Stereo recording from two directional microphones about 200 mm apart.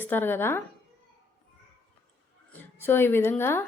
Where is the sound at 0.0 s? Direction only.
10° left (ahead or behind).